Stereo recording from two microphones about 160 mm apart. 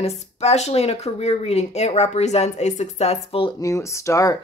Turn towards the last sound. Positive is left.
turn(degrees=20)  # may be behind; listen again after turning